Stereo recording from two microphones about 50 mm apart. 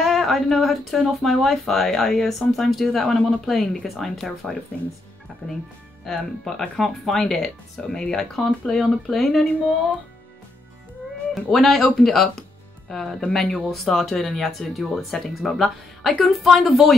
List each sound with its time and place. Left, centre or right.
0.0 s speech: centre
5.4 s speech: left
6.0 s speech: centre
11.3 s speech: centre